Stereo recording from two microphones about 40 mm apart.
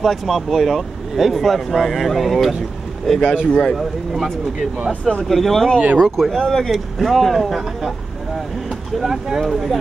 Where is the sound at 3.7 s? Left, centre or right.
Centre.